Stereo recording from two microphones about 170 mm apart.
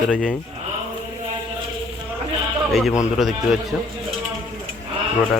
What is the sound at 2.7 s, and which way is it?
Speech, centre (ahead or behind).